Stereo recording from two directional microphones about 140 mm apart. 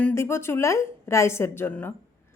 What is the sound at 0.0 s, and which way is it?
A woman's voice, 20° left (ahead or behind).